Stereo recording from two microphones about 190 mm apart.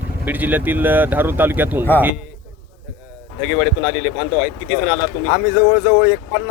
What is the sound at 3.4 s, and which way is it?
Speech, 5° right (ahead or behind).